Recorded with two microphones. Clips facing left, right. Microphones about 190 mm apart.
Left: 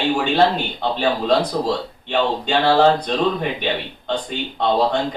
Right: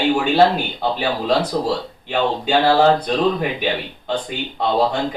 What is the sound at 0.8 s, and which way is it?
Speech, 5° right (ahead or behind).